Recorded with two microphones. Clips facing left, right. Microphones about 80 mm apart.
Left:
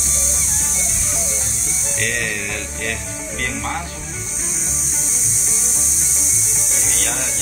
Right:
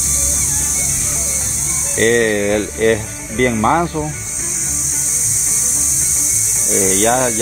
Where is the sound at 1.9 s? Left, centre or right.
Right.